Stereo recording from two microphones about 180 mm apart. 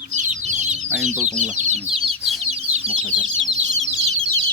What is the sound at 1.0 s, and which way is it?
Speech, 40° right (ahead or behind).